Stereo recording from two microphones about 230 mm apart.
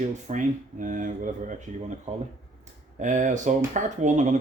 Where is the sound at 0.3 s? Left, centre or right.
Right.